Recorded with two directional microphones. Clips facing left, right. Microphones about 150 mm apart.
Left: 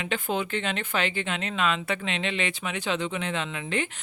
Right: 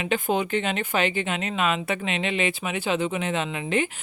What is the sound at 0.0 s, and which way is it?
Speech, 15° right (ahead or behind).